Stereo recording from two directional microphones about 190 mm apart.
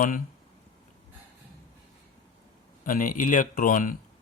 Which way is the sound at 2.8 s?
45° left (ahead or behind).